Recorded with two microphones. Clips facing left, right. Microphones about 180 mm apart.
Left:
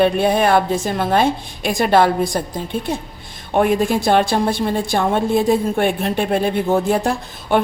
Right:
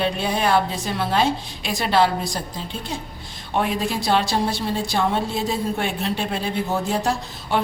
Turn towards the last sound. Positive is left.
turn(degrees=55)  # may be behind; listen again after turning